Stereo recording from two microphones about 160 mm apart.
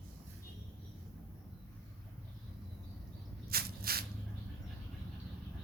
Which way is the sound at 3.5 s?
75° right (ahead or behind).